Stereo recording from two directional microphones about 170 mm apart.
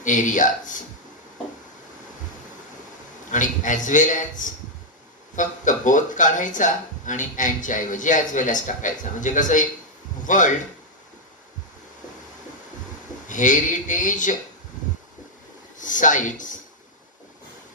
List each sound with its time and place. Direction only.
0.0 s speech: 50° left (ahead or behind)
3.3 s speech: 50° left (ahead or behind)
13.2 s speech: 50° left (ahead or behind)
15.8 s speech: 50° left (ahead or behind)